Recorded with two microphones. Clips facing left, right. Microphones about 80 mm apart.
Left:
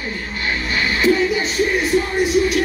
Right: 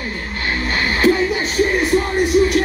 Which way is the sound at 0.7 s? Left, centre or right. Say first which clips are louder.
Right 1 dB; right.